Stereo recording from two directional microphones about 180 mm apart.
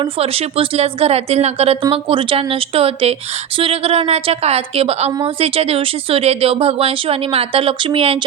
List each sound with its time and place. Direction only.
0.0 s speech: 35° right (ahead or behind)